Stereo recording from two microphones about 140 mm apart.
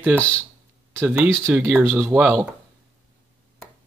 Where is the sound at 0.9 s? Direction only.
15° right (ahead or behind).